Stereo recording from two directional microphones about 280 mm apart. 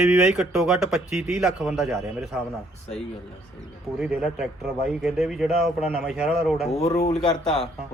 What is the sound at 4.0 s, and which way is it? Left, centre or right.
A man's voice, centre.